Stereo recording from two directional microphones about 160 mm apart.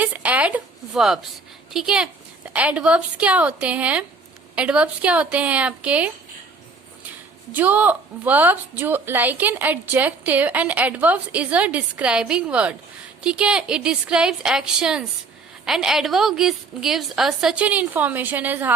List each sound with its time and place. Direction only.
0.0 s a woman's voice: 10° right (ahead or behind)
7.5 s a woman's voice: 10° right (ahead or behind)